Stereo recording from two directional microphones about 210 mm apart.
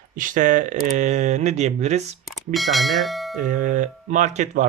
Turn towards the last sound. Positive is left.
turn(degrees=-35)  # may be behind; listen again after turning